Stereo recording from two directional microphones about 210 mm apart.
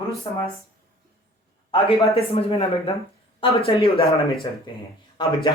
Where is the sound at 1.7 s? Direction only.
25° left (ahead or behind).